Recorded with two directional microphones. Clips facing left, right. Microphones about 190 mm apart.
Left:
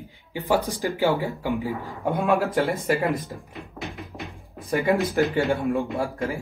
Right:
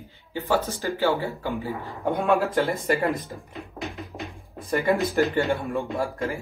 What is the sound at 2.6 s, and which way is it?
Speech, centre (ahead or behind).